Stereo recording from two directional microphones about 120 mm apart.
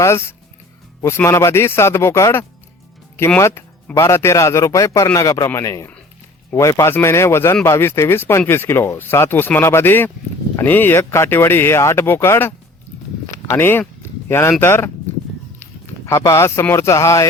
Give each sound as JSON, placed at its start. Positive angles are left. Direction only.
{"t": 0.0, "sound": "speech", "side_deg": 20}